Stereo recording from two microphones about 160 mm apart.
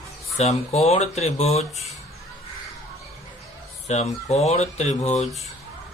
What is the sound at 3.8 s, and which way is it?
Speech, 45° left (ahead or behind).